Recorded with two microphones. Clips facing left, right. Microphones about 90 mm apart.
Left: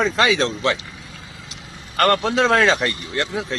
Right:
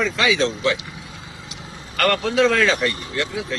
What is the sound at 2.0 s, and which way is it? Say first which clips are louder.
Speech: left 1 dB; 35° left (ahead or behind).